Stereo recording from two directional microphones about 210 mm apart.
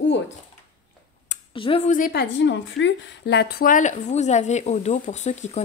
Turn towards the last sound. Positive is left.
turn(degrees=35)  # may be behind; listen again after turning